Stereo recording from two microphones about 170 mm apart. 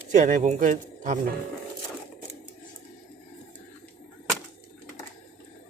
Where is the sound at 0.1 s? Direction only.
45° right (ahead or behind).